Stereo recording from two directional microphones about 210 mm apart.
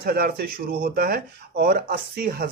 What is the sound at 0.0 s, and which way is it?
Speech, 45° right (ahead or behind).